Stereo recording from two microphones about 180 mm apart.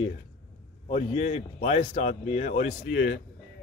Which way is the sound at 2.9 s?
60° left (ahead or behind).